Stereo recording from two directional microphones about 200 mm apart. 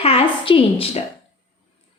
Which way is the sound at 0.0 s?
30° left (ahead or behind).